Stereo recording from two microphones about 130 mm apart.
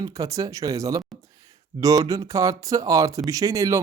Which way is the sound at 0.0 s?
25° right (ahead or behind).